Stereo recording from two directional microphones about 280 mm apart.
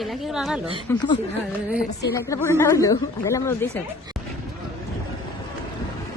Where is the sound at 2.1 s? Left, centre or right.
Centre.